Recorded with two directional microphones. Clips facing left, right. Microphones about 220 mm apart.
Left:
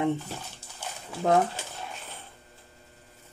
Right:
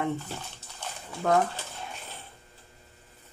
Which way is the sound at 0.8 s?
5° left (ahead or behind).